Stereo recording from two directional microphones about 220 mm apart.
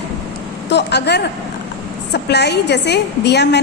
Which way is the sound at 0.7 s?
50° left (ahead or behind).